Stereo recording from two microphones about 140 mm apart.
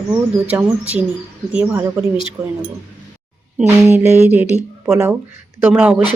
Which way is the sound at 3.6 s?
20° right (ahead or behind).